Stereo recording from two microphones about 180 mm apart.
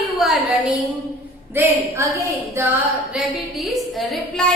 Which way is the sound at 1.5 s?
15° right (ahead or behind).